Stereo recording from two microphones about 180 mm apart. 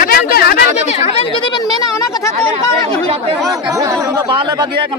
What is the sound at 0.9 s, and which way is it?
Speech, 35° left (ahead or behind).